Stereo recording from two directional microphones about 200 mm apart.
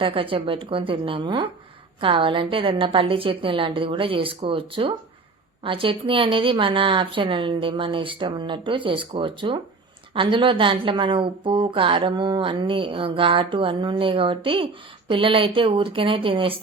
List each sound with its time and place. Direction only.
0.0 s a woman's voice: 25° right (ahead or behind)